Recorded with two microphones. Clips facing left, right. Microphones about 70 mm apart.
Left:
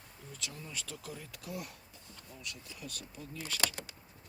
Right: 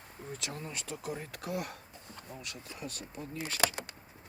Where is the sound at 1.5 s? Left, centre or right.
Right.